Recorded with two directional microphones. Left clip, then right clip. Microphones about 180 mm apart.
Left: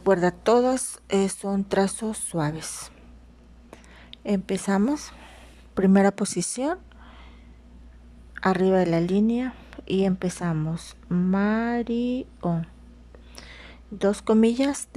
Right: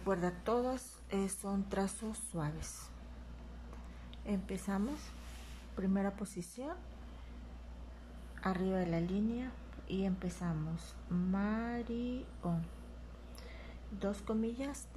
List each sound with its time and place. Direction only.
0.0 s speech: 50° left (ahead or behind)
4.1 s a woman's voice: 50° left (ahead or behind)
8.4 s a woman's voice: 65° left (ahead or behind)